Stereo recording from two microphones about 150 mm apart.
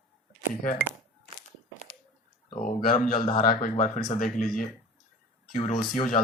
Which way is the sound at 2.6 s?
65° left (ahead or behind).